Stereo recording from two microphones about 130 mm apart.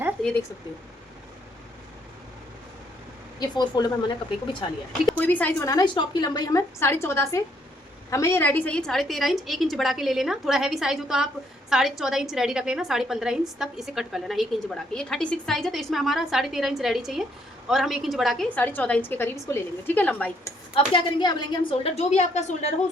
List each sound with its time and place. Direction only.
3.4 s a woman's voice: 30° left (ahead or behind)
5.1 s a woman's voice: 15° left (ahead or behind)
5.6 s a woman's voice: 30° left (ahead or behind); by 18.4 s centre (ahead or behind)
18.4 s a woman's voice: 15° left (ahead or behind)
20.7 s a woman's voice: 40° left (ahead or behind); by 22.7 s 60° left (ahead or behind)